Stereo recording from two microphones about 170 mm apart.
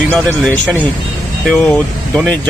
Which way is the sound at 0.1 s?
10° left (ahead or behind).